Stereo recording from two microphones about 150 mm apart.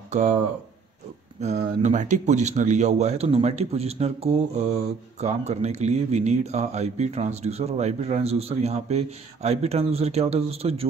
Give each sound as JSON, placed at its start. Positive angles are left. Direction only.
{"t": 0.1, "sound": "speech", "side_deg": -50}
{"t": 1.4, "sound": "speech", "side_deg": -50}